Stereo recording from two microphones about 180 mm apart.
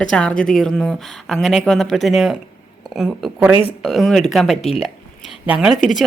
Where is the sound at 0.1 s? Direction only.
5° left (ahead or behind).